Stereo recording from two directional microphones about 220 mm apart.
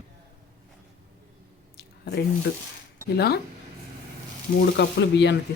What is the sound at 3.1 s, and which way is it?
Speech, 45° left (ahead or behind).